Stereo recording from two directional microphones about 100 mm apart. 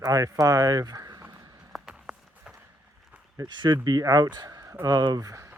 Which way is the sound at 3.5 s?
50° right (ahead or behind).